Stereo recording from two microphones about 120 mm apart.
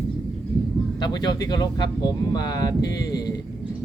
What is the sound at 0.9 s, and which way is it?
Speech, 35° left (ahead or behind).